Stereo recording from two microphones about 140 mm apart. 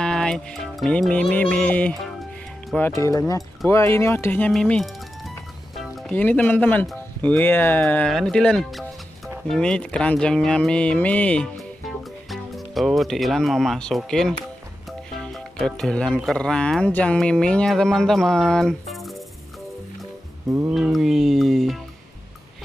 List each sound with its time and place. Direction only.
0.0 s music: 5° left (ahead or behind)
2.7 s speech: 5° left (ahead or behind)
3.0 s speech: 25° left (ahead or behind)
4.5 s music: 5° left (ahead or behind)
5.8 s speech: 5° left (ahead or behind)
14.9 s music: 5° left (ahead or behind)
16.2 s speech: 5° left (ahead or behind)
20.4 s music: 20° right (ahead or behind)
20.7 s speech: centre (ahead or behind)